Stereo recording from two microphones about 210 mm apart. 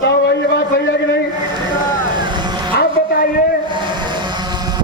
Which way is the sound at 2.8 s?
45° left (ahead or behind).